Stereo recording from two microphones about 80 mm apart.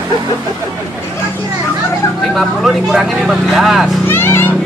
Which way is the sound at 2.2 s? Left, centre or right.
Centre.